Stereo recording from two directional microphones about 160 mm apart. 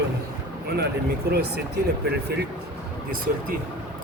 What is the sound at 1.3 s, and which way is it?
Speech, 90° right.